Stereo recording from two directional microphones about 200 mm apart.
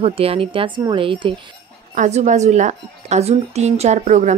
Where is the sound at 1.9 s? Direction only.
35° right (ahead or behind).